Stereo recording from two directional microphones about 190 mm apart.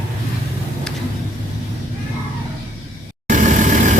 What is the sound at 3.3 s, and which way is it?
Vehicle, 40° right (ahead or behind).